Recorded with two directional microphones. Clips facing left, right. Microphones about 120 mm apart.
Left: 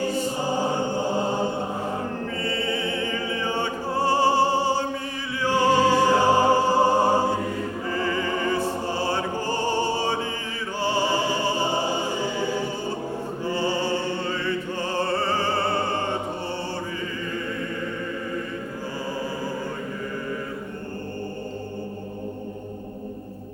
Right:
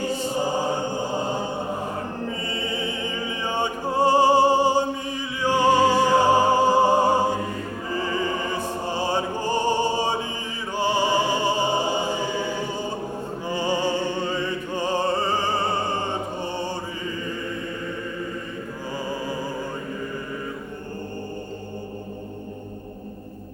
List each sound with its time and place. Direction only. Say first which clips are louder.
2.4 s opera: left 2 dB; 15° right (ahead or behind)
5.4 s music: right 1 dB; 15° right (ahead or behind)
10.8 s opera: right 2 dB; 15° right (ahead or behind)
13.4 s music: right 1 dB; 15° right (ahead or behind)
16.4 s mantra: right 2 dB; 15° right (ahead or behind)